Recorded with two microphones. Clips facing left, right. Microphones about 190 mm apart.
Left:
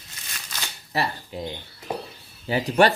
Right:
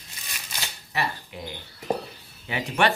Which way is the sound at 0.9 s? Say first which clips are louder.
Left 3 dB; 35° left (ahead or behind).